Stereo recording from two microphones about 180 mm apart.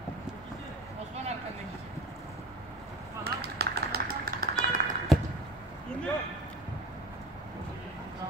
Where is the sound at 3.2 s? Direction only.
60° right (ahead or behind).